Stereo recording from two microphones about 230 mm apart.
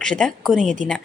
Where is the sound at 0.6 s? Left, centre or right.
Right.